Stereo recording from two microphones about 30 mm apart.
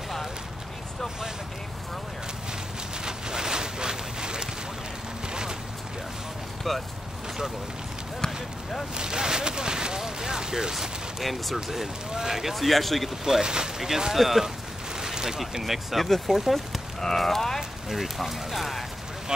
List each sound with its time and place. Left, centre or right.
3.1 s a sound: right
6.7 s speech: centre
8.9 s speech: right
11.2 s speech: centre
12.1 s speech: centre
12.5 s speech: centre
13.2 s speech: right
14.1 s speech: centre
15.0 s a sound: centre
15.6 s speech: centre
17.0 s speech: centre
17.6 s speech: centre